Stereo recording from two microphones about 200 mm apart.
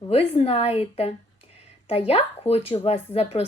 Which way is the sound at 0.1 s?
30° left (ahead or behind).